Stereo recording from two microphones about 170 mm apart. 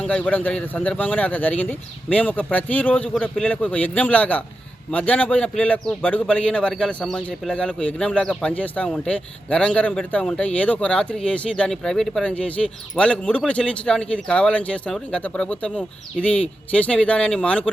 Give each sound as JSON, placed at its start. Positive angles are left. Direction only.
{"t": 0.0, "sound": "a man's voice", "side_deg": 10}